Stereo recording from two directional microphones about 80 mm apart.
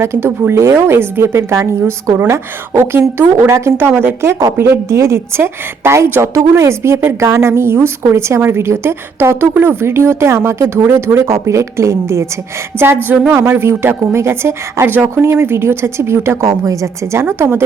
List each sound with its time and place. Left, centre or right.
0.0 s a woman's voice: right
3.8 s a woman's voice: right
15.1 s a woman's voice: right